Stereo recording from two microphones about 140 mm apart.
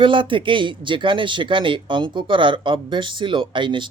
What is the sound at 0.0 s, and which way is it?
Speech, 35° right (ahead or behind).